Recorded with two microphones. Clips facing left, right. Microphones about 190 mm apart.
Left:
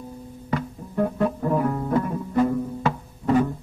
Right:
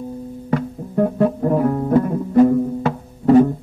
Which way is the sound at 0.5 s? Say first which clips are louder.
Right 6 dB; 45° right (ahead or behind).